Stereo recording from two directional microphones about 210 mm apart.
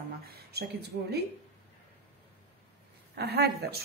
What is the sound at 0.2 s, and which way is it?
Speech, 50° right (ahead or behind).